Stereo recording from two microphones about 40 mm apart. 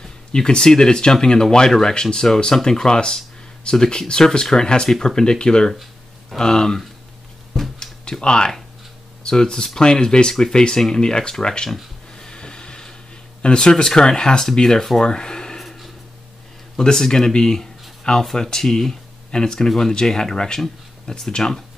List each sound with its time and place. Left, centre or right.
0.0 s speech: centre
7.8 s a sound: centre
8.2 s speech: left
12.2 s printer: centre
13.4 s speech: left
16.7 s speech: centre